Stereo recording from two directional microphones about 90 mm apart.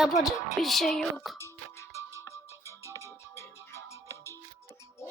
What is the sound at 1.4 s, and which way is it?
Music, 30° left (ahead or behind).